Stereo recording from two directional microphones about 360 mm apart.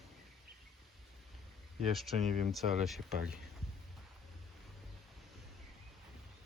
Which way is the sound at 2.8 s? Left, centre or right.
Centre.